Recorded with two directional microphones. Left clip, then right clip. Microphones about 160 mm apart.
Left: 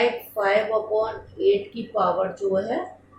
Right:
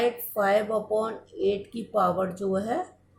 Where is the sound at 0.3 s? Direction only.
40° right (ahead or behind).